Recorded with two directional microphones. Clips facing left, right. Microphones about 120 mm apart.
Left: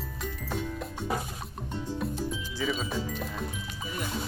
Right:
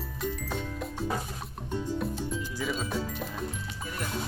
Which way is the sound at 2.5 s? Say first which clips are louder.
Left 2 dB; centre (ahead or behind).